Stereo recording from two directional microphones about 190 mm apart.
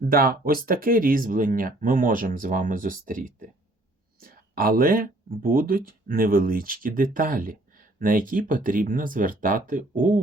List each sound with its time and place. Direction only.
0.0 s speech: 50° right (ahead or behind)